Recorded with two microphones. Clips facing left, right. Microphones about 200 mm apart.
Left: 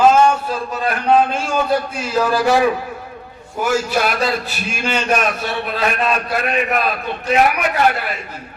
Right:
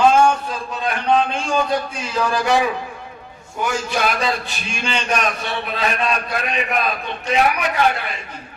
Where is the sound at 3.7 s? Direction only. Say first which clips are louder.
Left 4 dB; 5° left (ahead or behind).